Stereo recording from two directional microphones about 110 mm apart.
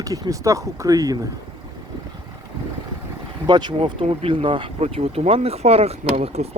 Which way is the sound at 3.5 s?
40° right (ahead or behind).